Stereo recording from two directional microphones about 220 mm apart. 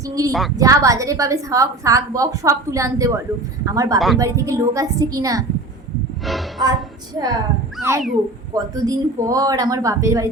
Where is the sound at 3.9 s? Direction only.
Centre (ahead or behind).